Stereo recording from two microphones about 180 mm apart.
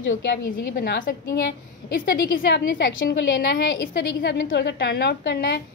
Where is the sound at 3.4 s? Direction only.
80° left.